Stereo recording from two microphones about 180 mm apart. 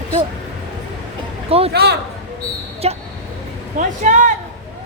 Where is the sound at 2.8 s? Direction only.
35° right (ahead or behind).